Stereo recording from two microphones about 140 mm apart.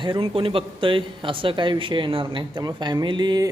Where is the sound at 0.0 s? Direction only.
40° right (ahead or behind).